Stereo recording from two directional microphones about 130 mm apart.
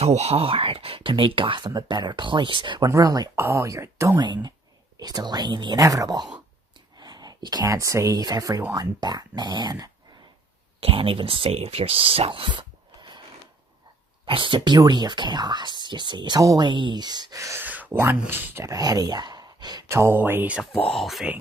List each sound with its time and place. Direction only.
0.0 s speech: 55° right (ahead or behind); by 2.9 s 35° right (ahead or behind)
2.9 s speech: 25° right (ahead or behind)
4.2 s speech: 35° right (ahead or behind)
5.8 s speech: 25° right (ahead or behind)
10.8 s speech: 45° right (ahead or behind)
14.2 s speech: 40° right (ahead or behind); by 17.6 s 25° right (ahead or behind)
17.6 s speech: 15° right (ahead or behind)
20.9 s speech: centre (ahead or behind)